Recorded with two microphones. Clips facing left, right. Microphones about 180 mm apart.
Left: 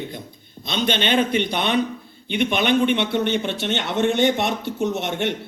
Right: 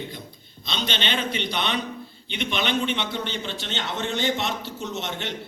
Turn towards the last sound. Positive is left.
turn(degrees=60)  # may be behind; listen again after turning